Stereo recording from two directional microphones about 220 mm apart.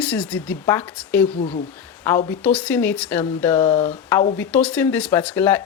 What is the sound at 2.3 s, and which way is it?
A woman's voice, 5° left (ahead or behind).